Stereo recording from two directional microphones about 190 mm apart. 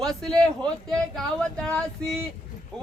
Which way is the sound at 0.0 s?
Centre (ahead or behind).